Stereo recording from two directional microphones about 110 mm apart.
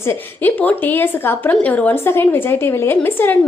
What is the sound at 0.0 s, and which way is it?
A woman's voice, 20° left (ahead or behind).